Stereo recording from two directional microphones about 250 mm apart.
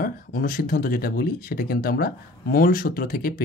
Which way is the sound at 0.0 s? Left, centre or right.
Left.